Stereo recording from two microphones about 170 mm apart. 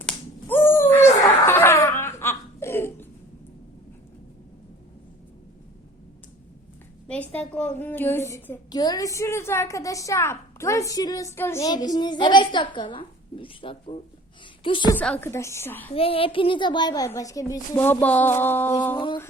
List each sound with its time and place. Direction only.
0.0 s a sound: 10° left (ahead or behind)
7.1 s a woman's voice: 10° left (ahead or behind); by 14.9 s 30° left (ahead or behind)
14.9 s a woman's voice: 10° left (ahead or behind)
16.0 s speech: 35° left (ahead or behind); by 18.9 s 10° left (ahead or behind)
18.9 s speech: 25° left (ahead or behind)